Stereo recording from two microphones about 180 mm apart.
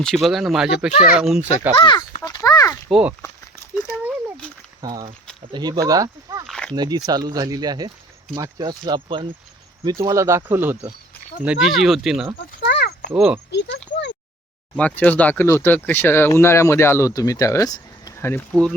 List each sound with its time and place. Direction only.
0.0 s speech: centre (ahead or behind)
0.9 s speech: 55° left (ahead or behind)
1.1 s speech: 5° right (ahead or behind)
1.7 s speech: 25° left (ahead or behind)
2.2 s a sound: 20° left (ahead or behind)
2.9 s speech: 5° right (ahead or behind)
4.8 s speech: 20° right (ahead or behind); by 12.3 s centre (ahead or behind)
12.6 s a sound: 60° left (ahead or behind)
13.5 s speech: 70° left (ahead or behind)
14.8 s speech: 10° left (ahead or behind)